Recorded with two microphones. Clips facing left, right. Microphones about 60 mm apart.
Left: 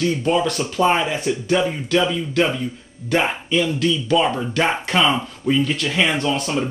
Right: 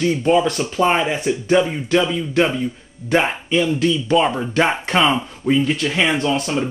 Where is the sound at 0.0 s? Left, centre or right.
Right.